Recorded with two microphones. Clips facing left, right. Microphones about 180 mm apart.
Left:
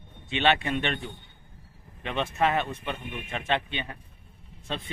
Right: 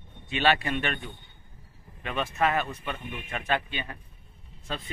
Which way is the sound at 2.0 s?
25° left (ahead or behind).